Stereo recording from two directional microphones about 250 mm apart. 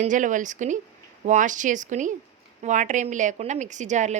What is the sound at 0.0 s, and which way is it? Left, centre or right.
A woman's voice, right.